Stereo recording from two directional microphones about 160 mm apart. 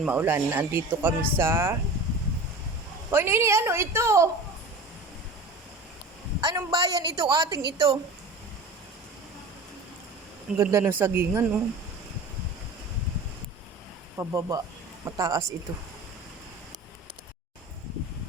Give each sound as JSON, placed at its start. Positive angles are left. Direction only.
{"t": 0.0, "sound": "speech", "side_deg": -10}
{"t": 3.1, "sound": "speech", "side_deg": -15}
{"t": 6.4, "sound": "a woman's voice", "side_deg": -20}
{"t": 10.6, "sound": "speech", "side_deg": -20}
{"t": 14.2, "sound": "a woman's voice", "side_deg": -20}